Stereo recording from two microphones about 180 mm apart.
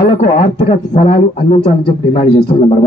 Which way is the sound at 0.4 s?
40° left (ahead or behind).